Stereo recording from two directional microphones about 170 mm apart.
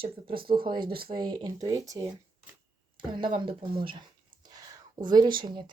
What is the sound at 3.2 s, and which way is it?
Speech, 30° right (ahead or behind).